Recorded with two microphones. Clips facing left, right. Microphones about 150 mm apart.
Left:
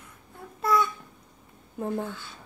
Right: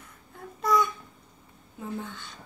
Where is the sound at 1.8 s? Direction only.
55° left (ahead or behind).